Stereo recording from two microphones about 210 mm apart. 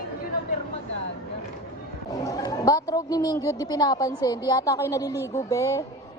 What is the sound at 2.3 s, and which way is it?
A woman's voice, 15° left (ahead or behind).